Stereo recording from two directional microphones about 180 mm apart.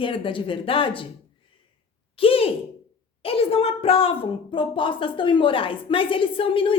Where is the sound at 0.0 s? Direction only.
30° left (ahead or behind).